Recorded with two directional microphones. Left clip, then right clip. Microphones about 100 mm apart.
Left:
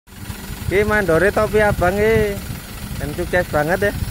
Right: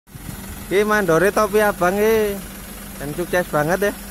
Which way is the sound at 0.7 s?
20° right (ahead or behind).